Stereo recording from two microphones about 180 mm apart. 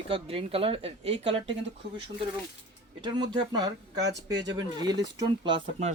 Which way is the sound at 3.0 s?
25° right (ahead or behind).